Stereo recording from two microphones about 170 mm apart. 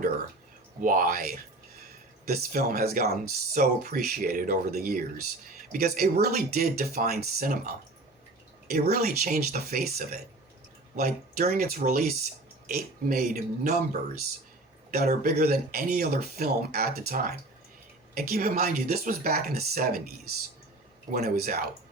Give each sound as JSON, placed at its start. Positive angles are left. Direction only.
{"t": 0.8, "sound": "speech", "side_deg": -55}
{"t": 21.1, "sound": "speech", "side_deg": -60}